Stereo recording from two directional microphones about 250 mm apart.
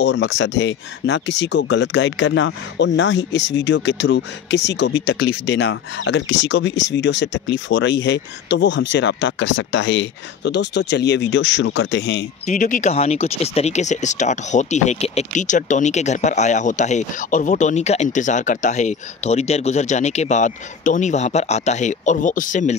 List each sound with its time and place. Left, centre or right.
0.0 s speech: left
12.4 s speech: left